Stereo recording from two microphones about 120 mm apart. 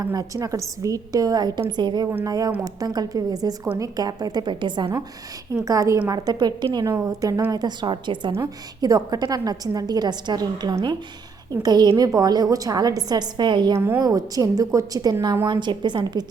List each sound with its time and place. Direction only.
0.0 s a woman's voice: 30° right (ahead or behind)
5.6 s a woman's voice: 25° right (ahead or behind)
13.7 s a woman's voice: 20° right (ahead or behind)
14.0 s a woman's voice: 30° right (ahead or behind)
15.4 s a woman's voice: 40° right (ahead or behind)